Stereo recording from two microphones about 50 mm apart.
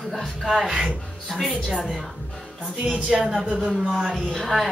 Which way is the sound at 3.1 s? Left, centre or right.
Centre.